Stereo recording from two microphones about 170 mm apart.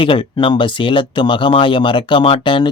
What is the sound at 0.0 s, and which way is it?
Speech, 30° left (ahead or behind).